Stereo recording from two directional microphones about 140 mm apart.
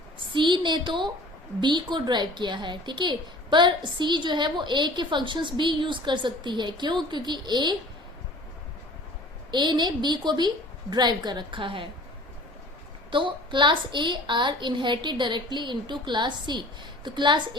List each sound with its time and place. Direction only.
0.3 s a woman's voice: 35° right (ahead or behind)
9.5 s a woman's voice: 30° right (ahead or behind)
13.1 s a woman's voice: 35° right (ahead or behind)